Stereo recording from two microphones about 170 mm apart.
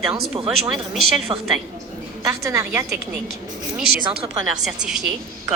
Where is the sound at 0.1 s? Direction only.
30° right (ahead or behind).